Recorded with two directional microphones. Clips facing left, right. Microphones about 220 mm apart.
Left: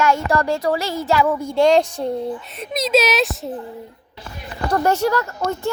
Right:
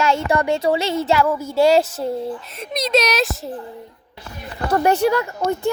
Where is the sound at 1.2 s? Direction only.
5° right (ahead or behind).